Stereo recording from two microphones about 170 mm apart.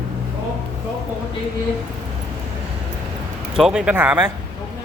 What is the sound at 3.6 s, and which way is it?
Speech, 5° right (ahead or behind).